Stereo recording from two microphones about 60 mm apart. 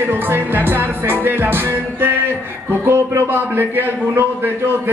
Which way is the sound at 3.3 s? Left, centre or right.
Right.